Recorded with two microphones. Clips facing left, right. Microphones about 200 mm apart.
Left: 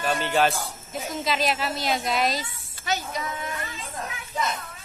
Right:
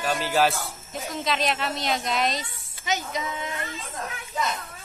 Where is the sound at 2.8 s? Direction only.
20° right (ahead or behind).